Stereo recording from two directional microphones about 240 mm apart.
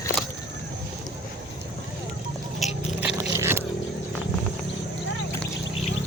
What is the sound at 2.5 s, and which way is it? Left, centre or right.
Scrape, centre.